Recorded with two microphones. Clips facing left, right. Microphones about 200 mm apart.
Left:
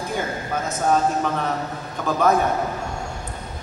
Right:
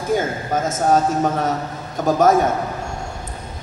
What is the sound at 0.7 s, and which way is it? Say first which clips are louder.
A man's voice: right 2 dB; 45° right (ahead or behind).